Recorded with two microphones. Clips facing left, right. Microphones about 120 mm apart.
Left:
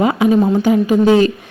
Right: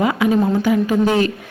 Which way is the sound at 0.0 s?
25° left (ahead or behind).